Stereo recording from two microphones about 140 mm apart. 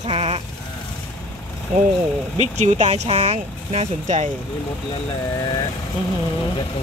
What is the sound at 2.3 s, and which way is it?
Speech, 50° right (ahead or behind).